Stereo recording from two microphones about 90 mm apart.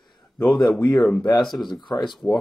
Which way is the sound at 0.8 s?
15° left (ahead or behind).